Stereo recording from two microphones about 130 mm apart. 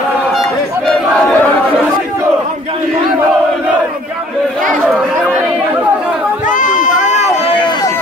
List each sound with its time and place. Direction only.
0.8 s battle cry: 10° left (ahead or behind)
6.4 s run: 80° left